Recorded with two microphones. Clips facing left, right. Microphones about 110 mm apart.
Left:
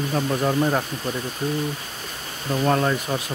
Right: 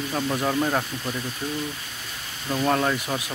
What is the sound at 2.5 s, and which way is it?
Speech, 5° left (ahead or behind).